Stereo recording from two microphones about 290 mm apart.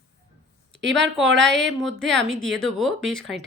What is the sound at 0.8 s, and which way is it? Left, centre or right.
Speech, right.